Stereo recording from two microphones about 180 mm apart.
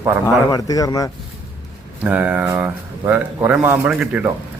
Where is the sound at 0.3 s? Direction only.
20° left (ahead or behind).